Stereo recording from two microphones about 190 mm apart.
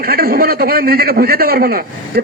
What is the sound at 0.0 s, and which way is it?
A man's voice, 50° right (ahead or behind).